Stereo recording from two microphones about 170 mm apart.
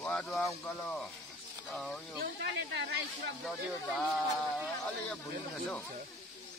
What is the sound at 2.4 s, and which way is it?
Speech, 90° right.